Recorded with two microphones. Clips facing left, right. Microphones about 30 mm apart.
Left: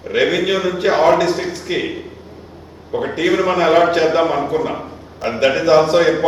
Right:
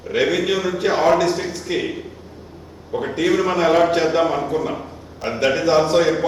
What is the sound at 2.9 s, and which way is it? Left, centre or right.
A man's voice, left.